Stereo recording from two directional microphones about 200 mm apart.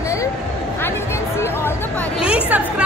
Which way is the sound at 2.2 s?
5° right (ahead or behind).